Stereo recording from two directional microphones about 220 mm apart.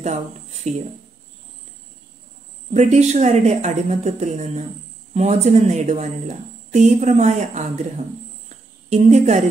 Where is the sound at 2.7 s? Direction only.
30° right (ahead or behind).